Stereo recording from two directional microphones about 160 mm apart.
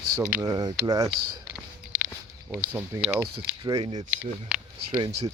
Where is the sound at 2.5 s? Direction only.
15° right (ahead or behind).